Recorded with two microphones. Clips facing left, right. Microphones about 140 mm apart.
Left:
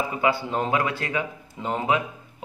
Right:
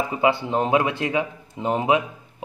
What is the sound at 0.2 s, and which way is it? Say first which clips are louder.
A man's voice: right 4 dB; 20° right (ahead or behind).